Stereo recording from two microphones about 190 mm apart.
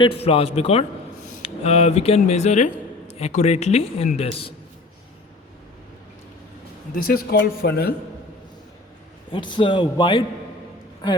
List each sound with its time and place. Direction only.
0.0 s a man's voice: 30° left (ahead or behind)
6.9 s speech: 50° left (ahead or behind)
9.3 s a man's voice: 25° left (ahead or behind)